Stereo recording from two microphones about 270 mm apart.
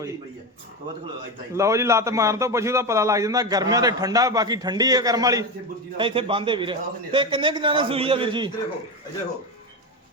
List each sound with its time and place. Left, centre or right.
1.5 s a man's voice: centre